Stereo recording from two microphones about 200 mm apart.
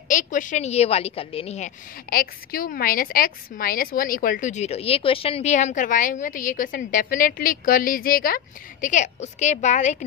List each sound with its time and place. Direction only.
0.1 s a woman's voice: 40° left (ahead or behind)
2.0 s a woman's voice: 45° left (ahead or behind)